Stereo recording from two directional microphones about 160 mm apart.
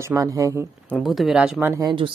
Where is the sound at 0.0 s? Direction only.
20° right (ahead or behind).